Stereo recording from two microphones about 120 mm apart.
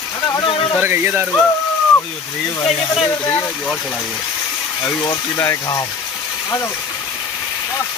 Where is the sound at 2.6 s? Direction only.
50° left (ahead or behind).